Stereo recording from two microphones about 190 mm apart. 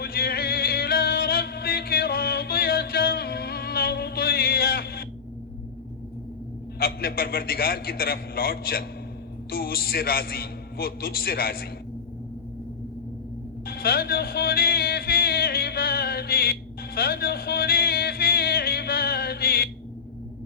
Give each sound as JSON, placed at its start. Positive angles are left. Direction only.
{"t": 0.0, "sound": "music", "side_deg": 55}
{"t": 6.7, "sound": "a man's voice", "side_deg": 50}
{"t": 13.7, "sound": "music", "side_deg": 50}